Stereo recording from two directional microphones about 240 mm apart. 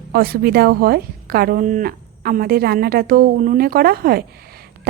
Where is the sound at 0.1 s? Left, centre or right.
Right.